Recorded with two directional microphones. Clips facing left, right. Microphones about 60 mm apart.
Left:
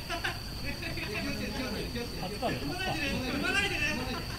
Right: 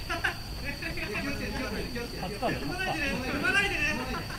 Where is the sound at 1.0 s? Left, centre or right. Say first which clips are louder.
Right 3 dB; right.